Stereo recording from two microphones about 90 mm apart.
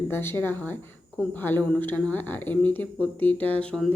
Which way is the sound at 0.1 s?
25° left (ahead or behind).